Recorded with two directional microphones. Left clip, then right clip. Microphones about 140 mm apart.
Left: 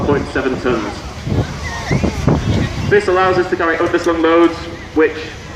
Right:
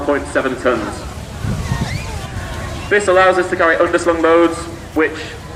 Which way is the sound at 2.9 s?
35° right (ahead or behind).